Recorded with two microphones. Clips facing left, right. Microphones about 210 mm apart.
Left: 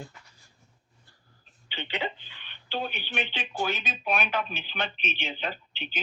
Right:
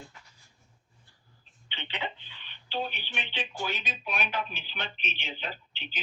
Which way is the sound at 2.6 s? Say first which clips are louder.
Left 1 dB; 50° left (ahead or behind).